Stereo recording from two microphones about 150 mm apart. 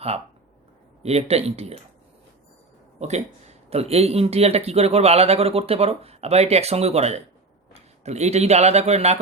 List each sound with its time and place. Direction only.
1.0 s speech: 45° right (ahead or behind)
3.0 s a man's voice: 45° right (ahead or behind)